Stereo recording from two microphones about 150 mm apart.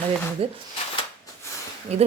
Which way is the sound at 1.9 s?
45° right (ahead or behind).